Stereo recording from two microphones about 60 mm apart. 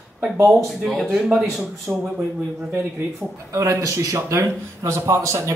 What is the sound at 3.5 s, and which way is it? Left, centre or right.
A man's voice, right.